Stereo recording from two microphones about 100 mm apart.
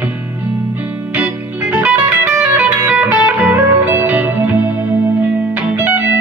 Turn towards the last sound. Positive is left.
turn(degrees=-15)  # may be behind; listen again after turning